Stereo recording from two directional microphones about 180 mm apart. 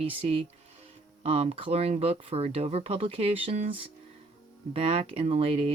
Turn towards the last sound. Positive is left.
turn(degrees=-35)  # may be behind; listen again after turning